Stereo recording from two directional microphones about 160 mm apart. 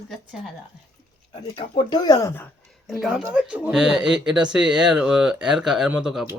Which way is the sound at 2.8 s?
Centre (ahead or behind).